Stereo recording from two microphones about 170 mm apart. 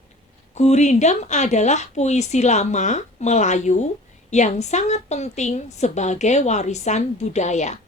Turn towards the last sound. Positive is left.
turn(degrees=45)  # may be behind; listen again after turning